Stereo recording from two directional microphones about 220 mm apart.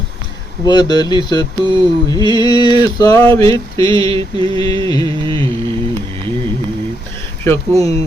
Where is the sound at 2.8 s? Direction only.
15° left (ahead or behind).